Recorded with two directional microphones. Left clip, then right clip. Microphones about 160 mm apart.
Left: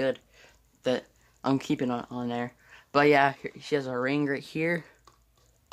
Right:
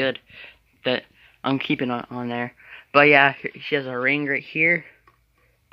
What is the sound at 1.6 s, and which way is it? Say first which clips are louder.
Speech: right 5 dB; 15° right (ahead or behind).